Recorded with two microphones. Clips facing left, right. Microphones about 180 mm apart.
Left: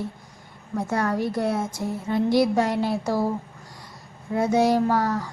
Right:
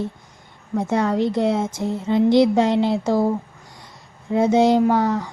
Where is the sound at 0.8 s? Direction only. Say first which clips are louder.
Right 5 dB; 20° right (ahead or behind).